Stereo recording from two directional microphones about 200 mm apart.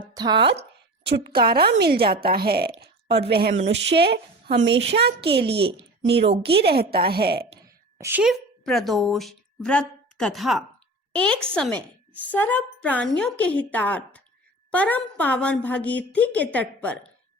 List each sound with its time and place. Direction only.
0.1 s speech: 20° right (ahead or behind)
1.0 s a woman's voice: 55° right (ahead or behind)
6.6 s a woman's voice: 55° right (ahead or behind)
7.9 s a woman's voice: 10° right (ahead or behind); by 17.1 s 5° left (ahead or behind)